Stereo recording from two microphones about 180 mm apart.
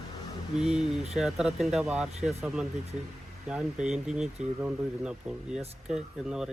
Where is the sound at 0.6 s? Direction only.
Centre (ahead or behind).